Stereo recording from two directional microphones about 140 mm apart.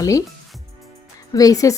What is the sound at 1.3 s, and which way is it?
Speech, 25° left (ahead or behind).